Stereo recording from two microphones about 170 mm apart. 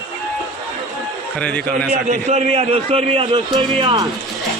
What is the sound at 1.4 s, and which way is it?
Speech, 5° left (ahead or behind).